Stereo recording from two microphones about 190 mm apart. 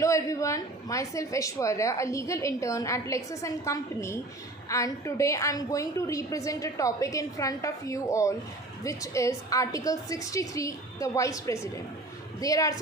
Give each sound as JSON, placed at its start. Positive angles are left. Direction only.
{"t": 0.0, "sound": "a woman's voice", "side_deg": 15}